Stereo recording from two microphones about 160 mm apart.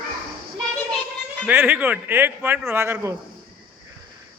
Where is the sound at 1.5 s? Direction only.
10° right (ahead or behind).